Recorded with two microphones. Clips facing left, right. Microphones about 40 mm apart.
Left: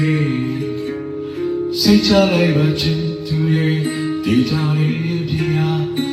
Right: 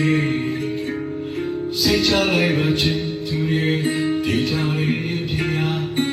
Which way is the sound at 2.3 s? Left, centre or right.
Right.